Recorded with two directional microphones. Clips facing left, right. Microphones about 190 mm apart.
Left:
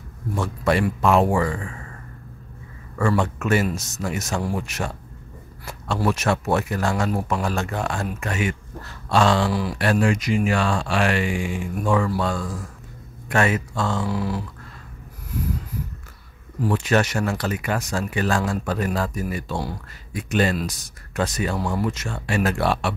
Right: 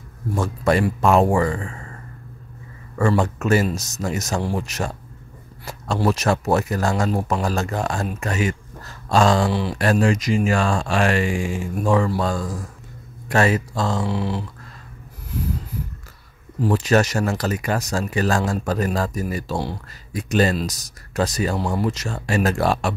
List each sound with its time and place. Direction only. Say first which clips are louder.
0.4 s a man's voice: right 2 dB; 40° right (ahead or behind)
3.2 s speech: right 2 dB; 40° right (ahead or behind)
5.9 s speech: right 2 dB; 35° right (ahead or behind)
9.5 s speech: right 1 dB; 25° right (ahead or behind)
9.8 s speech: right 2 dB; 40° right (ahead or behind)
16.6 s speech: right 3 dB; 40° right (ahead or behind)